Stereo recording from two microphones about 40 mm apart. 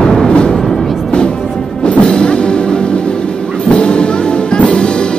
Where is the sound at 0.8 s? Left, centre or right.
Centre.